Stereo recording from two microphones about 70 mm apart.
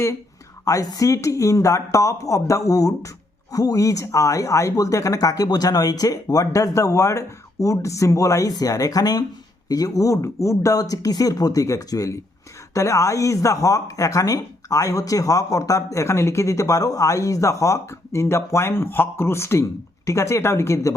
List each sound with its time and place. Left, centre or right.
0.6 s speech: left